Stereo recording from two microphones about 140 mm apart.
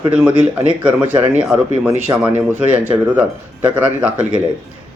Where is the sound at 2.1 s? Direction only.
25° right (ahead or behind).